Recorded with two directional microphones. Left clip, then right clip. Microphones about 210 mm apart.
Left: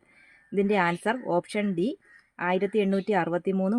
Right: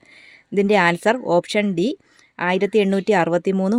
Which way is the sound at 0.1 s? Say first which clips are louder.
Right 7 dB; 50° right (ahead or behind).